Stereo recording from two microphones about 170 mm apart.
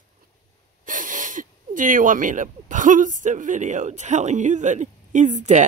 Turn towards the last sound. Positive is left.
turn(degrees=-45)  # may be behind; listen again after turning